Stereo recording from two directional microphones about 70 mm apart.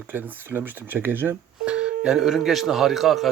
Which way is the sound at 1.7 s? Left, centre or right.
Centre.